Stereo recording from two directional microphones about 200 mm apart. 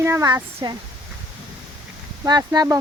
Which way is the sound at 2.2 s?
20° right (ahead or behind).